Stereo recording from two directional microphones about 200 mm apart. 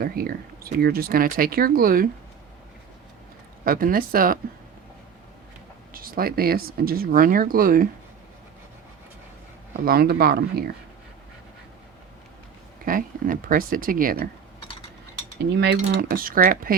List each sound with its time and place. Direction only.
0.0 s speech: 45° right (ahead or behind)
3.6 s speech: 45° right (ahead or behind)
5.9 s speech: 45° right (ahead or behind)
9.8 s speech: 50° right (ahead or behind)
12.8 s speech: 45° right (ahead or behind)
15.4 s speech: 60° right (ahead or behind)